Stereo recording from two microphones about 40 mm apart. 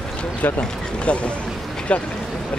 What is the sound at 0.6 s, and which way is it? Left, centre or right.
Speech, left.